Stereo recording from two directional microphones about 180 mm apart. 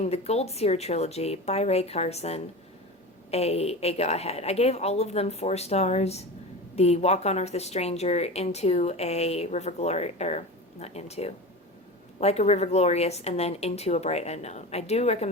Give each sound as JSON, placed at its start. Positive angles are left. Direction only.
{"t": 0.0, "sound": "a woman's voice", "side_deg": 35}